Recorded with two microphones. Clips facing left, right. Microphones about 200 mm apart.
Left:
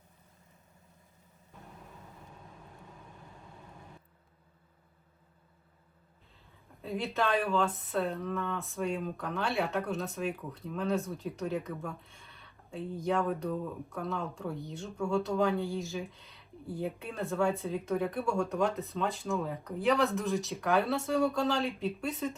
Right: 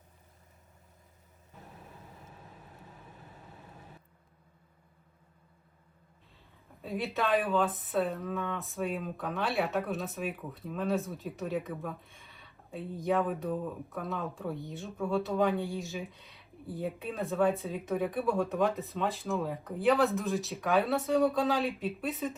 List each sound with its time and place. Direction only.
6.8 s speech: centre (ahead or behind)